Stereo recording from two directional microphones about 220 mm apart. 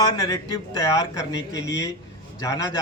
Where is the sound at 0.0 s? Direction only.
15° left (ahead or behind).